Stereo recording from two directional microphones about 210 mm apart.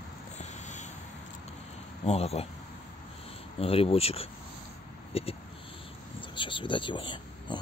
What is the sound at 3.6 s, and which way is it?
Speech, 25° left (ahead or behind).